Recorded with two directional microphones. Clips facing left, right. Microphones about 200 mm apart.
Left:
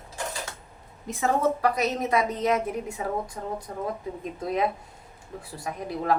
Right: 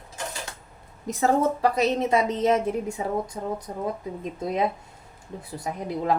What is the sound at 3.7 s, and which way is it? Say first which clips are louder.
A woman's voice: right 2 dB; 20° right (ahead or behind).